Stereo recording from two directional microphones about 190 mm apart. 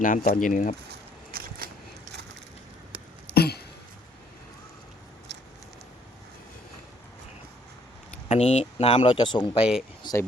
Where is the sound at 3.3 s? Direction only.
55° left (ahead or behind).